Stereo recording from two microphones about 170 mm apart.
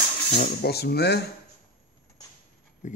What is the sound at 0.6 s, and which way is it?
Speech, 70° left (ahead or behind).